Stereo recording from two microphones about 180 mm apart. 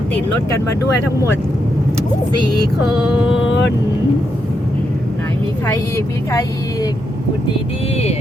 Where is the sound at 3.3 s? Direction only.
85° left.